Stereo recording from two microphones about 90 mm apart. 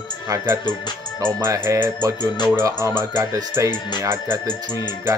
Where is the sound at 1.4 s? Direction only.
30° right (ahead or behind).